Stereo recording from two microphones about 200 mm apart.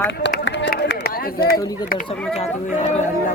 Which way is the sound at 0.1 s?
60° left (ahead or behind).